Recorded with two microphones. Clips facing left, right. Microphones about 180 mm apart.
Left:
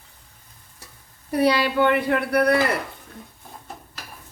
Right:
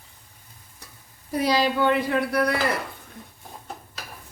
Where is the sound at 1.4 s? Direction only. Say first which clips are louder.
Left 2 dB; 60° left (ahead or behind).